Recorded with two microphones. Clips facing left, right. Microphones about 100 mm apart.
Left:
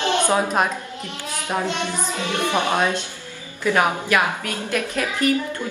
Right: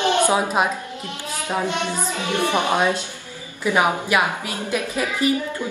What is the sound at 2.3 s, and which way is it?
Speech, 15° right (ahead or behind).